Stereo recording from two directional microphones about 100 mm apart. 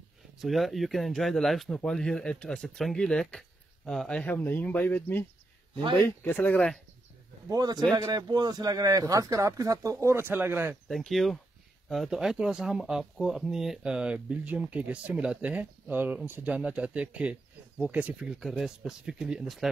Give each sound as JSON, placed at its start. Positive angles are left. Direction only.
{"t": 0.4, "sound": "speech", "side_deg": 0}
{"t": 4.2, "sound": "speech", "side_deg": 15}
{"t": 7.4, "sound": "speech", "side_deg": -40}
{"t": 10.9, "sound": "speech", "side_deg": 0}